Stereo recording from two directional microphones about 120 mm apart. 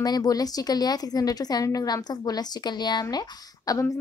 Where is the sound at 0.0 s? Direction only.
35° left (ahead or behind).